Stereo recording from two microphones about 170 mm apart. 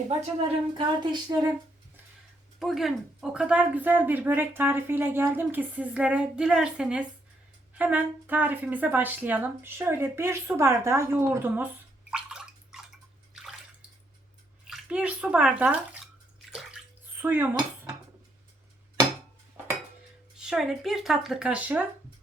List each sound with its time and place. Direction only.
0.2 s speech: 30° right (ahead or behind)
2.6 s speech: centre (ahead or behind)
12.1 s gargling: 5° right (ahead or behind)
14.7 s a child's voice: 5° right (ahead or behind)
16.5 s bathtub: 5° right (ahead or behind)
19.6 s dishes: 10° right (ahead or behind)
20.4 s speech: 5° right (ahead or behind)